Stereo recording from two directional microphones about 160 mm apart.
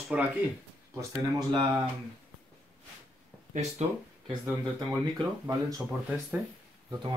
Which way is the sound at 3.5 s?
45° right (ahead or behind).